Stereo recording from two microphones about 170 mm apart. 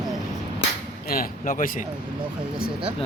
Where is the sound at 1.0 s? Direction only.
55° left (ahead or behind).